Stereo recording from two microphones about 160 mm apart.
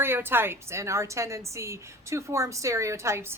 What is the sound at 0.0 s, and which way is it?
A woman's voice, 15° right (ahead or behind).